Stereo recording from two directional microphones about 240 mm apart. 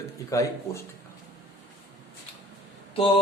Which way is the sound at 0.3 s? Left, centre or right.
Centre.